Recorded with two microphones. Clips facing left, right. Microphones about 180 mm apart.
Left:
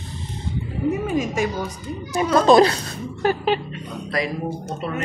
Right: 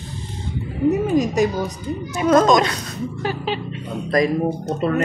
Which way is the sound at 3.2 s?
50° left (ahead or behind).